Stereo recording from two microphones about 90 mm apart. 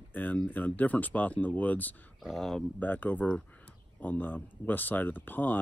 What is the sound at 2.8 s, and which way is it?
Speech, 20° left (ahead or behind).